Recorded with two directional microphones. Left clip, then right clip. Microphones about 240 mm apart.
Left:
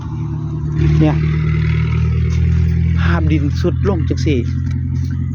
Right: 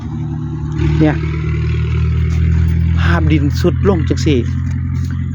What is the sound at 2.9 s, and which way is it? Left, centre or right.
Speech, centre.